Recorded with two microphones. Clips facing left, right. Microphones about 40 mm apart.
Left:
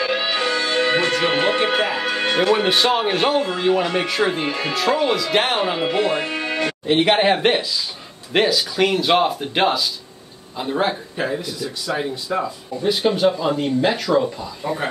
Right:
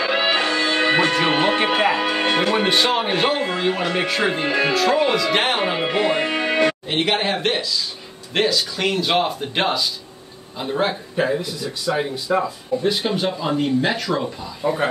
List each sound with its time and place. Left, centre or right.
0.2 s speech: centre
6.2 s music: right
7.1 s speech: centre